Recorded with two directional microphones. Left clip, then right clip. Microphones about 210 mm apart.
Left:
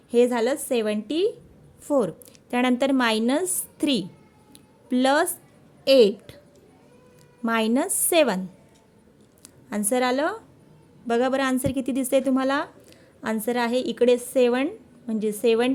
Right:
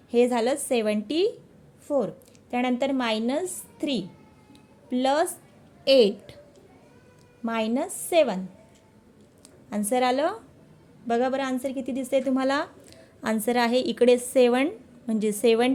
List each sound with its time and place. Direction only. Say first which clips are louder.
0.1 s a woman's voice: left 2 dB; 15° left (ahead or behind)
1.9 s a woman's voice: left 3 dB; 25° left (ahead or behind)
7.4 s a woman's voice: left 4 dB; 25° left (ahead or behind)
9.6 s a woman's voice: even; 20° left (ahead or behind)